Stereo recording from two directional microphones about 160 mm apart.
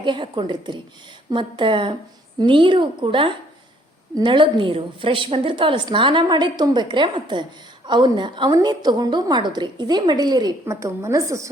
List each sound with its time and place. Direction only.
0.0 s a woman's voice: 30° right (ahead or behind)